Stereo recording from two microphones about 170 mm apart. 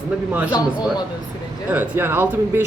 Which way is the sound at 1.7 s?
10° right (ahead or behind).